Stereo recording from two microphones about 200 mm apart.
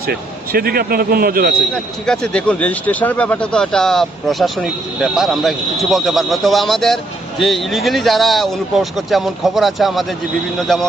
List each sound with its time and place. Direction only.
0.1 s speech: 50° right (ahead or behind)
1.7 s speech: 5° left (ahead or behind)